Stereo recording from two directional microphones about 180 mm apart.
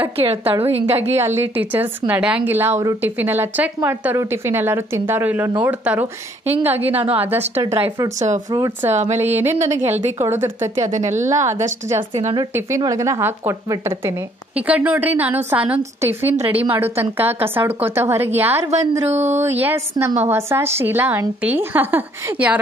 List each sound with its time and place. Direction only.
0.2 s a woman's voice: 30° right (ahead or behind)
1.1 s a woman's voice: 15° right (ahead or behind)
6.9 s a woman's voice: 35° right (ahead or behind)
7.2 s a woman's voice: 10° right (ahead or behind)
7.6 s a woman's voice: 30° right (ahead or behind)
8.9 s a woman's voice: 40° right (ahead or behind)
9.3 s a woman's voice: 15° right (ahead or behind)
10.9 s a woman's voice: 40° right (ahead or behind)
11.1 s a woman's voice: 15° right (ahead or behind)
12.1 s a woman's voice: 35° right (ahead or behind)
12.5 s a woman's voice: 15° right (ahead or behind)
19.0 s a woman's voice: 40° right (ahead or behind)
19.6 s a woman's voice: 15° right (ahead or behind)